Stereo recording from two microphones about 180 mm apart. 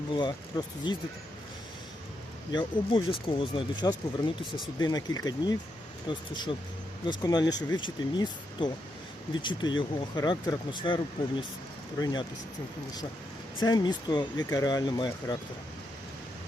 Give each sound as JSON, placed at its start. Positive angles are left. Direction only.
{"t": 0.2, "sound": "speech", "side_deg": 25}
{"t": 2.5, "sound": "speech", "side_deg": 25}
{"t": 13.7, "sound": "speech", "side_deg": 25}